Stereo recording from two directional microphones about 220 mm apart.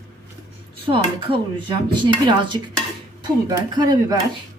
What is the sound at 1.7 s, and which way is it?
Speech, 20° right (ahead or behind).